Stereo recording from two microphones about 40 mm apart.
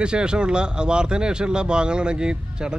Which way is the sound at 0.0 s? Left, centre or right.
Right.